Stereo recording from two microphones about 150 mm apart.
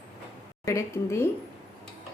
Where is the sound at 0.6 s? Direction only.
20° left (ahead or behind).